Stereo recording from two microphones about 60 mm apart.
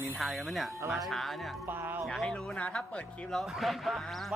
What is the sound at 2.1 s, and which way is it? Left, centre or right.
Speech, centre.